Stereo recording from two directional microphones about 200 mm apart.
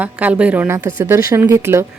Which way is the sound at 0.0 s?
5° right (ahead or behind).